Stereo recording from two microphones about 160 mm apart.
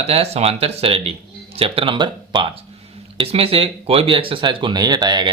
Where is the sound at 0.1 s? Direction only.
40° right (ahead or behind).